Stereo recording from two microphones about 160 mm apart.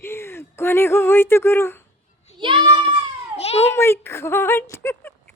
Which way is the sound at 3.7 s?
15° left (ahead or behind).